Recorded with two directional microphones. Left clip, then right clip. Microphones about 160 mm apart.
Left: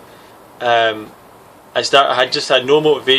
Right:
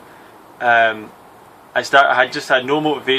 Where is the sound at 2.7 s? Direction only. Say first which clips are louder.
Left 5 dB; 15° left (ahead or behind).